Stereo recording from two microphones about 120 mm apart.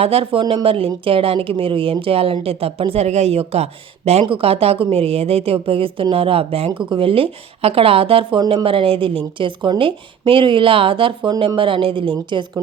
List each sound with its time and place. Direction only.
0.0 s speech: 55° right (ahead or behind)
0.3 s speech: 45° right (ahead or behind)